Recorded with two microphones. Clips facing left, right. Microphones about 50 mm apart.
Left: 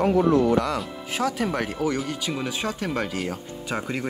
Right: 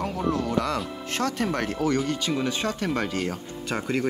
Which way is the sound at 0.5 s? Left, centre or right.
Centre.